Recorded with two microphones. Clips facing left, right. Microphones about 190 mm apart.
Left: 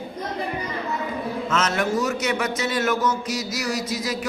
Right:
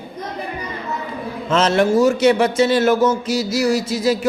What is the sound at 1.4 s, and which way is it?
A man's voice, 30° right (ahead or behind).